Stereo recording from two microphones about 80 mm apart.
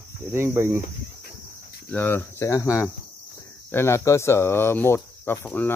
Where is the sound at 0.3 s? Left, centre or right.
Right.